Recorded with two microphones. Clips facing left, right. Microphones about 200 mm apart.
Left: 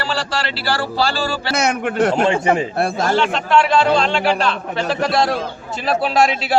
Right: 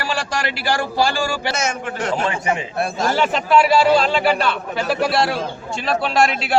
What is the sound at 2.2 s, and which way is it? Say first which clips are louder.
Speech: left 6 dB; 30° left (ahead or behind).